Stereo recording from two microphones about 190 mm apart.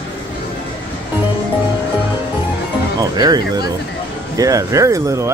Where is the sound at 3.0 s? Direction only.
20° right (ahead or behind).